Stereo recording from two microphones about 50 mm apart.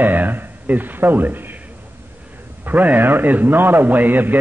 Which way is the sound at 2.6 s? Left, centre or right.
Right.